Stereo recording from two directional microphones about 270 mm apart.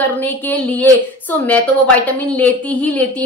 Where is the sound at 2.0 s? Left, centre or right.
Centre.